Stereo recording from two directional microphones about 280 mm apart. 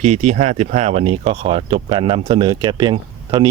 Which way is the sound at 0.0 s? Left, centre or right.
Right.